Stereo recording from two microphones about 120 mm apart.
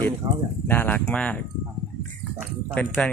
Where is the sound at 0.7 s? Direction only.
15° left (ahead or behind).